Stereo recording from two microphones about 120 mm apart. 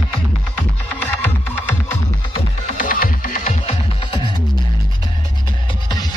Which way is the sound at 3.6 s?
50° left (ahead or behind).